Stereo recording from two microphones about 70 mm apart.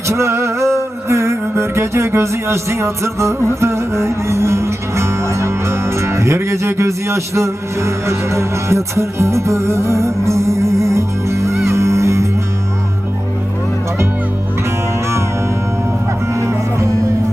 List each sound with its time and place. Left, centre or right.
0.1 s music: right
16.3 s music: right